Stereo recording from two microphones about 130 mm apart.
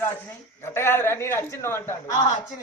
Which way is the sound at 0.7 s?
20° left (ahead or behind).